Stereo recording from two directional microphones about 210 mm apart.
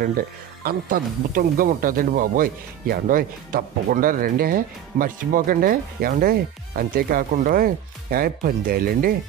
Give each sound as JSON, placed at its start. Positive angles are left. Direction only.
{"t": 0.7, "sound": "speech", "side_deg": -40}